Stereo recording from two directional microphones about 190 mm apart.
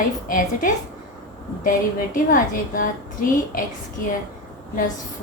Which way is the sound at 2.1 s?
45° left (ahead or behind).